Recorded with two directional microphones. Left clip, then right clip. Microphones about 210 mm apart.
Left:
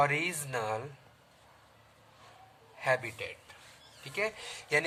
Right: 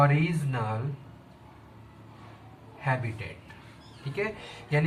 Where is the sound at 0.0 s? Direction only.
45° left (ahead or behind).